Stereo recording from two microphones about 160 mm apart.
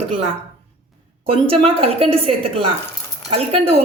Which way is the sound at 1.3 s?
35° right (ahead or behind).